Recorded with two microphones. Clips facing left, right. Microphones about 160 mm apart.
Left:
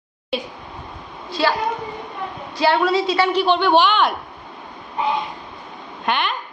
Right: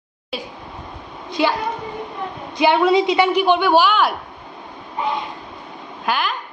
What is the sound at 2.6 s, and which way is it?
A woman's voice, 20° right (ahead or behind).